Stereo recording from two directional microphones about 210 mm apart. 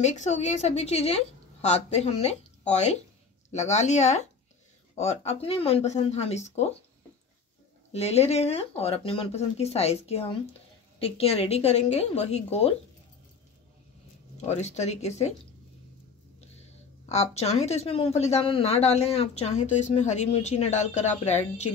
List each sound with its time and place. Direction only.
0.0 s speech: 35° left (ahead or behind)
7.9 s speech: 30° left (ahead or behind)
14.3 s speech: 30° left (ahead or behind)
16.3 s speech: 30° left (ahead or behind)